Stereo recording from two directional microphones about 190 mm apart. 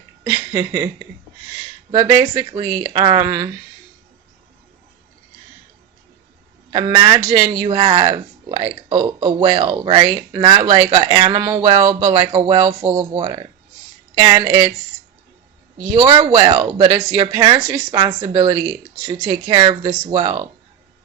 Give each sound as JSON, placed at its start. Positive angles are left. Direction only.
{"t": 0.3, "sound": "a sound", "side_deg": -20}
{"t": 1.9, "sound": "speech", "side_deg": -20}
{"t": 6.7, "sound": "speech", "side_deg": -25}
{"t": 16.0, "sound": "speech", "side_deg": -20}